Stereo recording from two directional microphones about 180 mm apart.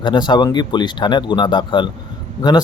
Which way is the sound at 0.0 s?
25° left (ahead or behind).